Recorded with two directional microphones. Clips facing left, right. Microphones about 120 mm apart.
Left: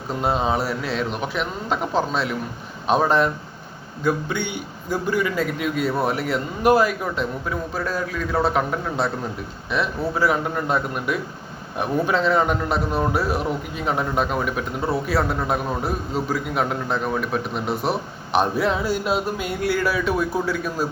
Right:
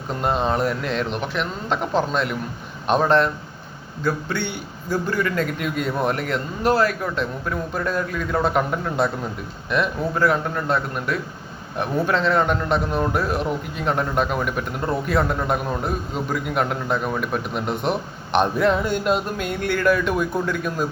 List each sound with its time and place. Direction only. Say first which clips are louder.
0.2 s a man's voice: right 1 dB; 5° left (ahead or behind)